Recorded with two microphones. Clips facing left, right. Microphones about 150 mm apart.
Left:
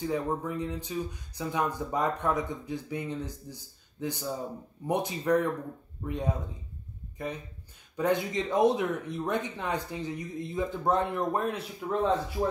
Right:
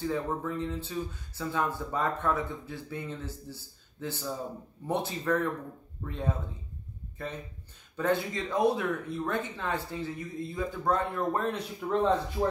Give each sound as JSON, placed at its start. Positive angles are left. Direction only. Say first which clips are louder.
{"t": 0.0, "sound": "speech", "louder": "left 1 dB", "side_deg": 15}